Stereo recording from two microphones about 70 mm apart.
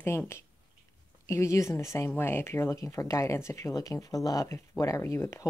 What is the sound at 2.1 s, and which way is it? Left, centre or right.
Speech, left.